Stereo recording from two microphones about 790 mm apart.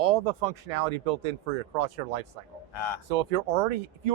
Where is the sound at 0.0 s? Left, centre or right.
Right.